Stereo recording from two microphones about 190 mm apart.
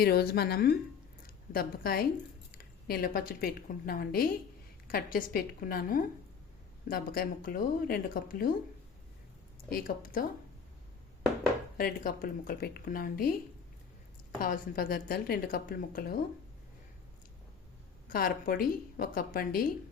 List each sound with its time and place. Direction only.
0.0 s a woman's voice: 55° left (ahead or behind)
9.6 s a woman's voice: 50° left (ahead or behind)
11.8 s a woman's voice: 50° left (ahead or behind)
14.4 s a woman's voice: 45° left (ahead or behind)
18.1 s a woman's voice: 50° left (ahead or behind)